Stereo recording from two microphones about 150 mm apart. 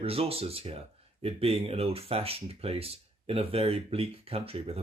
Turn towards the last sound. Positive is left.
turn(degrees=-40)  # may be behind; listen again after turning